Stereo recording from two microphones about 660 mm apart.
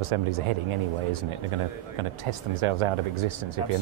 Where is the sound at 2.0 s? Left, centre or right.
Right.